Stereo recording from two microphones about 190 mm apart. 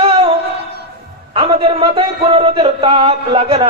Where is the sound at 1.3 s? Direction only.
30° right (ahead or behind).